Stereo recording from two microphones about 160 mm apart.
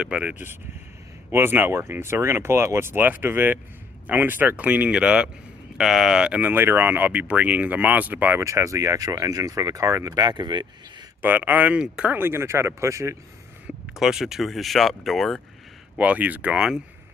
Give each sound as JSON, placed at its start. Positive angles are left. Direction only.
{"t": 0.0, "sound": "speech", "side_deg": -5}
{"t": 11.2, "sound": "speech", "side_deg": -10}
{"t": 13.9, "sound": "speech", "side_deg": -5}